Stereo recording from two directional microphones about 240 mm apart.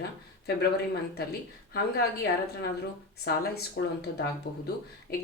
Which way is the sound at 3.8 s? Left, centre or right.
Left.